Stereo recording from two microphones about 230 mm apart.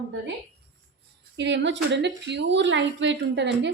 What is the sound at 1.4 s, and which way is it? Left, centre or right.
A woman's voice, right.